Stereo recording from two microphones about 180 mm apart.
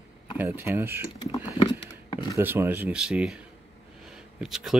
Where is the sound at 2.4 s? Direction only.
10° right (ahead or behind).